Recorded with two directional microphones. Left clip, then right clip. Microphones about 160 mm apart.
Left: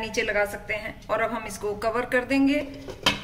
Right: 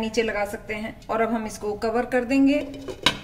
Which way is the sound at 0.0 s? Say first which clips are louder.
Even; 55° right (ahead or behind).